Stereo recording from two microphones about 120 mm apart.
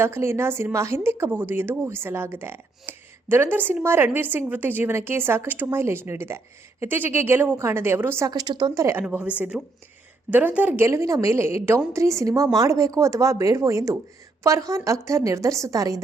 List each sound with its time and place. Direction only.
0.0 s a woman's voice: 20° right (ahead or behind)
8.3 s speech: 35° right (ahead or behind)
9.5 s speech: centre (ahead or behind)
10.3 s a woman's voice: 15° right (ahead or behind); by 16.0 s 30° right (ahead or behind)